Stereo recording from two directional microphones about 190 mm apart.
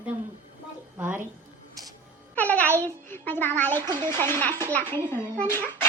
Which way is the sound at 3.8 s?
20° right (ahead or behind).